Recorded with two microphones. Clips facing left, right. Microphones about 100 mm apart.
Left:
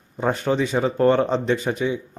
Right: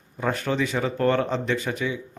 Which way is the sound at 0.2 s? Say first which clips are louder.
Left 4 dB; 25° left (ahead or behind).